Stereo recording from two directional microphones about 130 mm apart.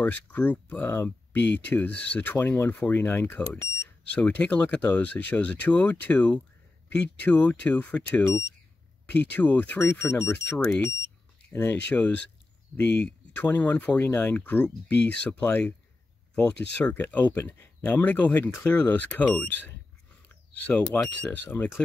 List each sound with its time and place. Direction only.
0.0 s speech: 10° left (ahead or behind)